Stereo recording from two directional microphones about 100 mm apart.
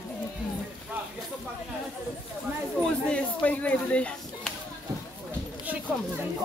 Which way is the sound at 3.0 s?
15° left (ahead or behind).